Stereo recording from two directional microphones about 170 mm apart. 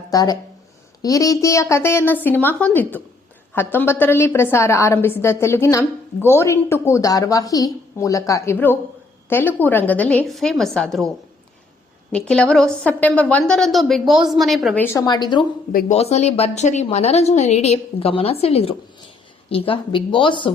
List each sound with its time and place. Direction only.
0.1 s a woman's voice: 20° left (ahead or behind); by 11.1 s centre (ahead or behind)
12.1 s a woman's voice: 5° left (ahead or behind)
14.8 s a woman's voice: 15° left (ahead or behind)
15.0 s a woman's voice: 25° left (ahead or behind)
15.7 s a woman's voice: 40° left (ahead or behind)